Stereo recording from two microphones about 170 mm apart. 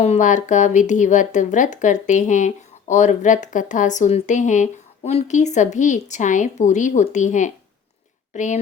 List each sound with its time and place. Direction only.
0.0 s speech: 45° left (ahead or behind)